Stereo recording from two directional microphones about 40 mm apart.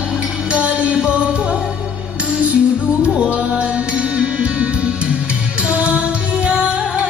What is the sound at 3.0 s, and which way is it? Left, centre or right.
Music, right.